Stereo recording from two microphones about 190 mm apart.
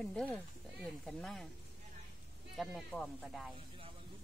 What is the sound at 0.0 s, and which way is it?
Speech, 5° left (ahead or behind).